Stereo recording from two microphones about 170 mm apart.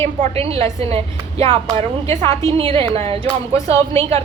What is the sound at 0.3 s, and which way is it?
Speech, 35° right (ahead or behind).